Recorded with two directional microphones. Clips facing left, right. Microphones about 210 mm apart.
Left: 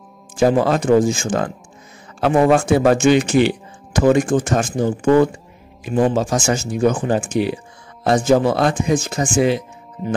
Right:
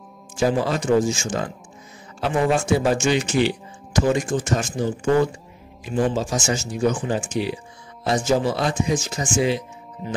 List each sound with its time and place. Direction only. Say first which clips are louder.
0.4 s speech: left 6 dB; 55° left (ahead or behind)
10.0 s speech: left 7 dB; centre (ahead or behind)